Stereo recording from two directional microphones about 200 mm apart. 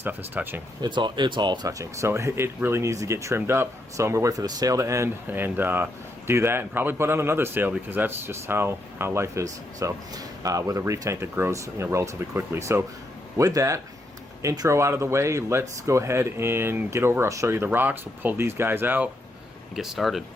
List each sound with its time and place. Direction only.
0.0 s speech: 10° right (ahead or behind)
0.8 s speech: 25° right (ahead or behind); by 20.2 s centre (ahead or behind)